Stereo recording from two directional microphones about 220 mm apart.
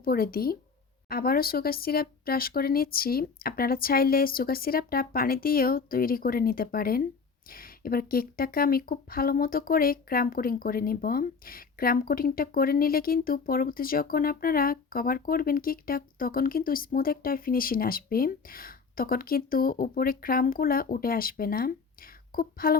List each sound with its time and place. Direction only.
0.0 s speech: 40° left (ahead or behind)